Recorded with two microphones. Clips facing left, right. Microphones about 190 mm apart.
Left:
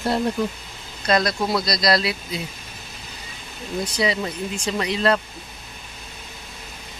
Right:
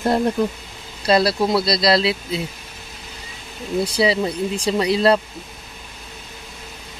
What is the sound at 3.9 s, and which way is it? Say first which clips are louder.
Speech: right 4 dB; 30° right (ahead or behind).